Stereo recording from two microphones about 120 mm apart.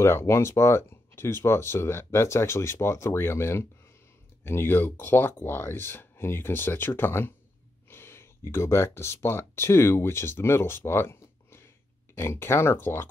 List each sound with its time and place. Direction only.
0.0 s speech: 20° left (ahead or behind)